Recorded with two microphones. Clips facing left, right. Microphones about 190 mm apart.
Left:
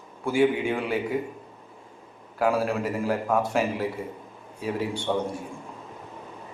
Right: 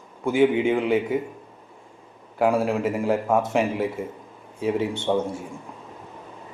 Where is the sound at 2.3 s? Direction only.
25° right (ahead or behind).